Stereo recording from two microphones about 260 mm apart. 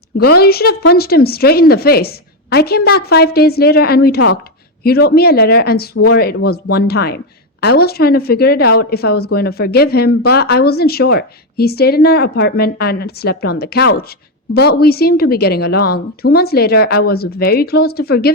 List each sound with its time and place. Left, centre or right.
0.3 s a woman's voice: left